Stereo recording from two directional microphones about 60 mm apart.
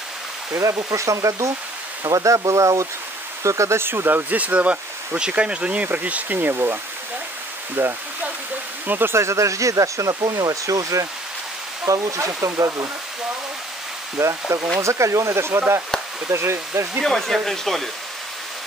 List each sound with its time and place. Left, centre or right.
0.5 s speech: right
2.0 s speech: right
3.8 s speech: right
9.1 s speech: right
14.1 s speech: right
17.0 s speech: centre